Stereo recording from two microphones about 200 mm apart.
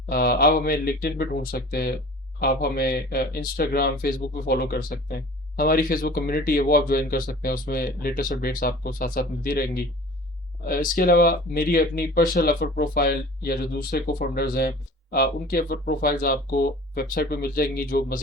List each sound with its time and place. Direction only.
0.1 s speech: 50° left (ahead or behind)